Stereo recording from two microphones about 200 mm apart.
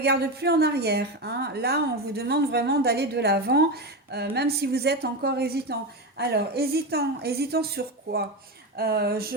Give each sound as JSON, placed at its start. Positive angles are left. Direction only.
{"t": 0.0, "sound": "a woman's voice", "side_deg": -55}